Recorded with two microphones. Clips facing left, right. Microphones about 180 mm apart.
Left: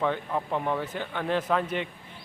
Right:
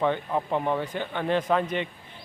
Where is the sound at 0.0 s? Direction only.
5° right (ahead or behind).